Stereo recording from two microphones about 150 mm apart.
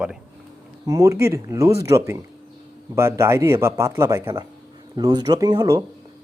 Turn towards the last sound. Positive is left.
turn(degrees=-25)  # may be behind; listen again after turning